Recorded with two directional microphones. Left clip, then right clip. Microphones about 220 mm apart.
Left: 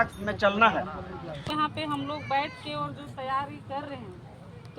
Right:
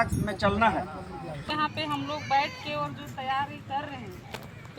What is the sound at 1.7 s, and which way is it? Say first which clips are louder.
Speech: right 1 dB; 5° left (ahead or behind).